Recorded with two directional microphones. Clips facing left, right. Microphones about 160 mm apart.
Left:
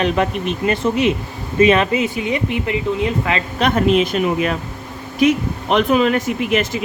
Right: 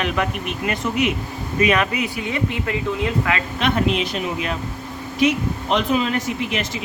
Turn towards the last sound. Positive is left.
turn(degrees=55)  # may be behind; listen again after turning